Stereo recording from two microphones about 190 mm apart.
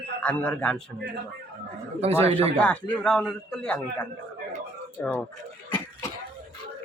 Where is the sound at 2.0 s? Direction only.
35° right (ahead or behind).